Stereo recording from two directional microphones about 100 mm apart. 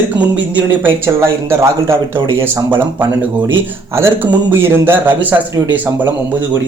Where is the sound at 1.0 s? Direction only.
25° right (ahead or behind).